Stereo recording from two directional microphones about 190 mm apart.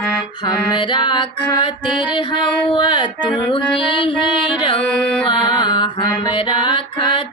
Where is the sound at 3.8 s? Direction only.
25° left (ahead or behind).